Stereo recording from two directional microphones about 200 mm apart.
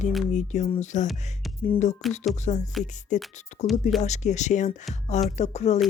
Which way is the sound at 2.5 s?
35° left (ahead or behind).